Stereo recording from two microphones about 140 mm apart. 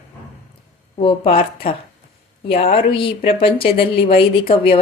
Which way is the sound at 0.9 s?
45° left (ahead or behind).